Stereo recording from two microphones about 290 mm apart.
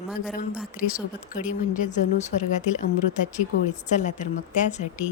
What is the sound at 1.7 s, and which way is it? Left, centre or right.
Speech, left.